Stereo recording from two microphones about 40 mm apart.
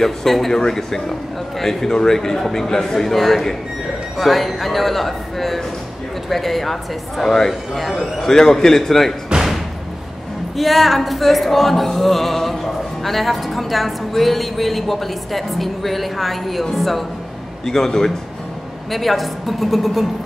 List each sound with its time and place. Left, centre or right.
0.0 s a man's voice: centre
4.2 s music: centre
8.0 s a man's voice: centre
9.3 s music: right
10.5 s music: centre
17.6 s a man's voice: centre
18.9 s music: centre